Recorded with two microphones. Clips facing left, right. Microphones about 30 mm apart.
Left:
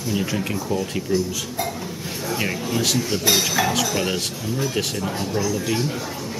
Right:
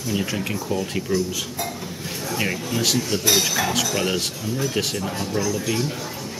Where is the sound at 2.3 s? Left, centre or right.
Centre.